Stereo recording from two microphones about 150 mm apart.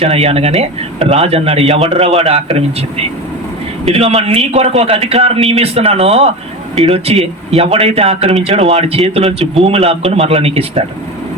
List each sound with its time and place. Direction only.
0.0 s speech: 45° right (ahead or behind)